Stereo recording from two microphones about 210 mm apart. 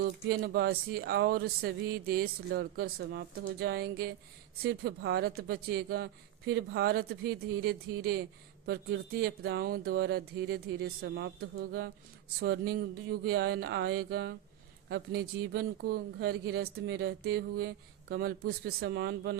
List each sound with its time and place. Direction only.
0.0 s speech: 50° right (ahead or behind)